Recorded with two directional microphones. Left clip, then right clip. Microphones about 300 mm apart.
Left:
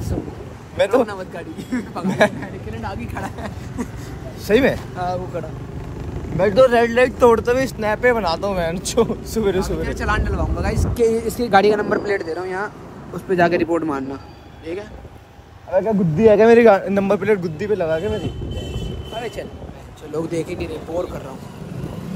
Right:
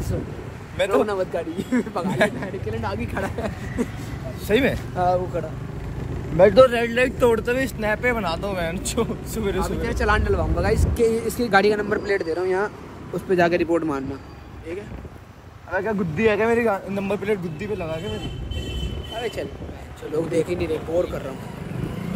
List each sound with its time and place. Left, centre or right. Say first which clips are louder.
0.7 s speech: left 4 dB; centre
1.0 s speech: right 4 dB; centre
2.0 s speech: left 6 dB; centre
2.4 s speech: right 2 dB; centre
4.5 s speech: left 4 dB; centre
4.9 s speech: right 3 dB; centre
6.7 s speech: left 6 dB; left
9.8 s speech: even; centre
16.2 s speech: left 9 dB; left
16.9 s speech: left 7 dB; centre
19.1 s a sound: even; centre
20.3 s speech: right 2 dB; centre